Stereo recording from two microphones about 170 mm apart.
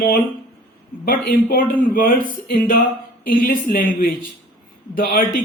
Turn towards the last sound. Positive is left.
turn(degrees=55)  # may be behind; listen again after turning